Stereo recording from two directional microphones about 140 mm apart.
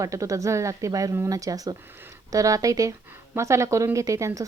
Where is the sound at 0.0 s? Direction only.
25° right (ahead or behind).